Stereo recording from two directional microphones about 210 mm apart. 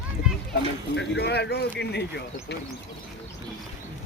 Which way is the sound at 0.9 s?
50° left (ahead or behind).